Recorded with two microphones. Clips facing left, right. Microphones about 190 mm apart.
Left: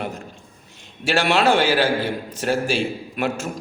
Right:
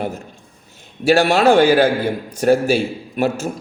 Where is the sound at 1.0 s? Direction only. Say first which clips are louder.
Right 5 dB; 40° right (ahead or behind).